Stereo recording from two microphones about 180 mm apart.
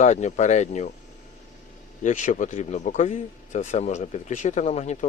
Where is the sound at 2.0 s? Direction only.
45° left (ahead or behind).